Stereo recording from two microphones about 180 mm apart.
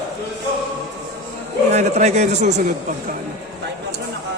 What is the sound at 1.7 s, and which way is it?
A man's voice, 40° right (ahead or behind).